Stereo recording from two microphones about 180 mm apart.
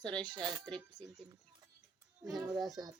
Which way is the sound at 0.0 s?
5° left (ahead or behind).